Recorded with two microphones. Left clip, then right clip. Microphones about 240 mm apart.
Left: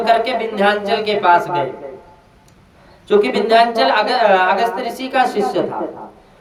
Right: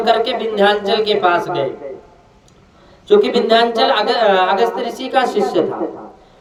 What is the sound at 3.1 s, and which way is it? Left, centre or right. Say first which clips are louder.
Speech: right 1 dB; centre.